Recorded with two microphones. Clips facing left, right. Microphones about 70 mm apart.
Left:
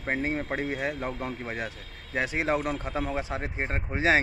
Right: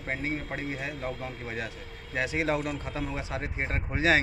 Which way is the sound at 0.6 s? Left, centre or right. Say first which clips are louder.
Left 4 dB; left.